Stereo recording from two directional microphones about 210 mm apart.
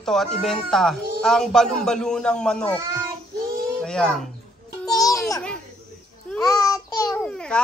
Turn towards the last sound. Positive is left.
turn(degrees=5)  # may be behind; listen again after turning